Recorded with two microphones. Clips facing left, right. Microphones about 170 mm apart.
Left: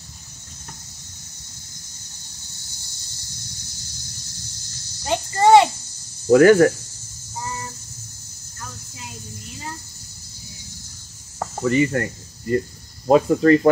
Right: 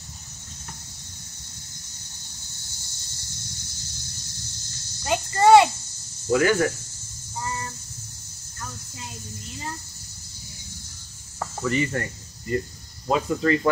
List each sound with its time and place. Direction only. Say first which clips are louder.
5.0 s cricket: left 1 dB; 25° left (ahead or behind)
6.2 s speech: left 9 dB; 50° left (ahead or behind)
7.3 s a sound: even; 20° left (ahead or behind)
11.3 s cricket: left 5 dB; 30° left (ahead or behind)
11.9 s speech: left 5 dB; 45° left (ahead or behind)